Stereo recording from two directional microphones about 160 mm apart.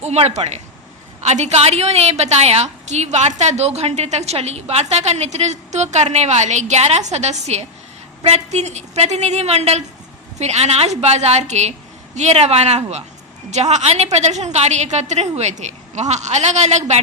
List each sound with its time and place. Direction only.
0.0 s a woman's voice: 40° right (ahead or behind)